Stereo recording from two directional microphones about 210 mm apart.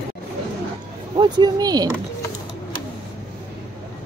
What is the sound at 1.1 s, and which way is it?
Speech, 20° right (ahead or behind).